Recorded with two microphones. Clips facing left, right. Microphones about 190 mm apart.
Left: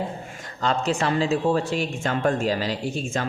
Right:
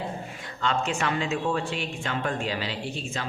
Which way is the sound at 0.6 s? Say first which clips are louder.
Left 4 dB; 40° left (ahead or behind).